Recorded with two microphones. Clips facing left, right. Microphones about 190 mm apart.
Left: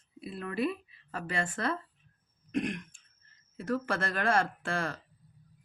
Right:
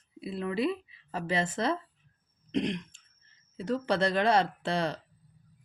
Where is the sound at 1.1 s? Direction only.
20° right (ahead or behind).